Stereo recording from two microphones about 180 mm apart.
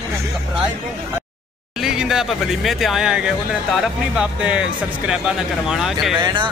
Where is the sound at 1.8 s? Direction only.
5° right (ahead or behind).